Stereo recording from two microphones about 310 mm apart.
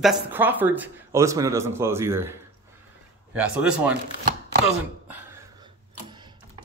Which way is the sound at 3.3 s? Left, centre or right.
Centre.